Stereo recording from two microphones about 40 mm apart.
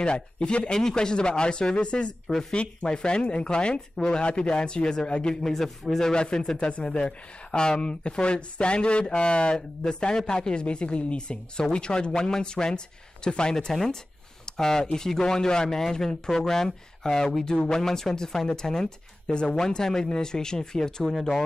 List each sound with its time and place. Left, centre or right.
0.0 s speech: left
5.4 s speech: centre
14.4 s a sound: centre
15.0 s speech: centre